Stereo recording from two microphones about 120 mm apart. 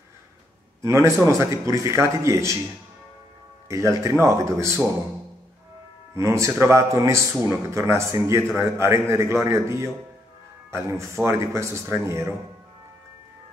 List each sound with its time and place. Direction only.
0.8 s speech: 25° right (ahead or behind)
3.9 s speech: 25° right (ahead or behind)
6.1 s speech: 25° right (ahead or behind)